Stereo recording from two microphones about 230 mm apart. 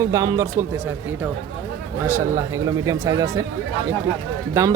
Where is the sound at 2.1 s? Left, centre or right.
Centre.